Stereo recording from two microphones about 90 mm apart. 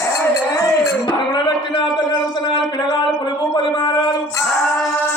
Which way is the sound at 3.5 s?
55° left (ahead or behind).